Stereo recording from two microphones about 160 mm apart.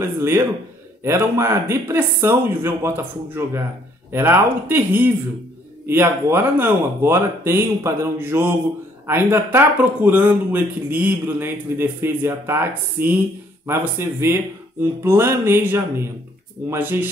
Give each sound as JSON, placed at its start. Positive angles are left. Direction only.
{"t": 0.0, "sound": "speech", "side_deg": -15}